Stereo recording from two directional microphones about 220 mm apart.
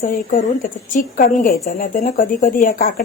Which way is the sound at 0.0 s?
35° left (ahead or behind).